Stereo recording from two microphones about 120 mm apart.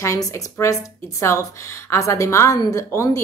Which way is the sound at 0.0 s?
25° left (ahead or behind).